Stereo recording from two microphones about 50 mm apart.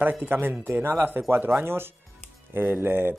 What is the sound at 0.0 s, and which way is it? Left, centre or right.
Speech, right.